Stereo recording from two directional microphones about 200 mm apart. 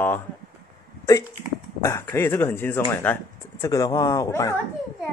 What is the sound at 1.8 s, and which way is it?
Speech, 10° left (ahead or behind).